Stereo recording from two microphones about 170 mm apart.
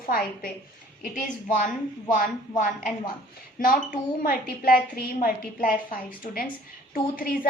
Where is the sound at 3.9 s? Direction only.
60° left (ahead or behind).